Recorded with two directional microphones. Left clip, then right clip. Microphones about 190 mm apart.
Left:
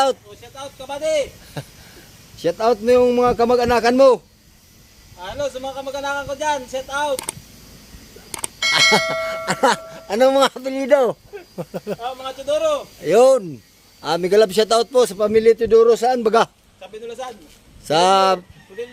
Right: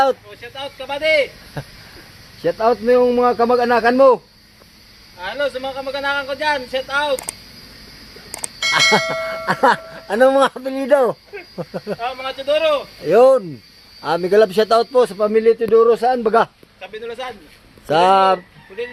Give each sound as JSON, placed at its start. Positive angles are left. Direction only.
{"t": 0.0, "sound": "a man's voice", "side_deg": 10}
{"t": 1.6, "sound": "speech", "side_deg": 5}
{"t": 2.4, "sound": "a man's voice", "side_deg": 15}
{"t": 5.2, "sound": "a man's voice", "side_deg": 20}
{"t": 8.3, "sound": "a sound", "side_deg": 0}
{"t": 9.6, "sound": "speech", "side_deg": 10}
{"t": 11.9, "sound": "a man's voice", "side_deg": 20}
{"t": 17.8, "sound": "a man's voice", "side_deg": 10}